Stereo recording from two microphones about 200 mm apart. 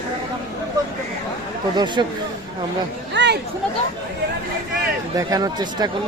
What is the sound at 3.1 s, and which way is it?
Speech, 60° right (ahead or behind).